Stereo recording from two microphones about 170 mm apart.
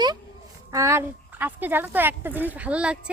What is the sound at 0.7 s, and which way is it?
Speech, 15° right (ahead or behind).